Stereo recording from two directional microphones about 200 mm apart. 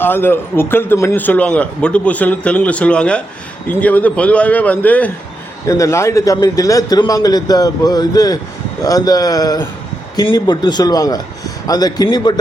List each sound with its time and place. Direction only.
0.0 s a man's voice: 10° left (ahead or behind)